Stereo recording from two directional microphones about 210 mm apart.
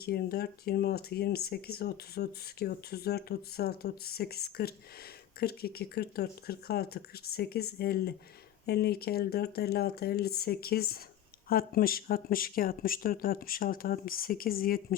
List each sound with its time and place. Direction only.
0.0 s speech: 45° left (ahead or behind)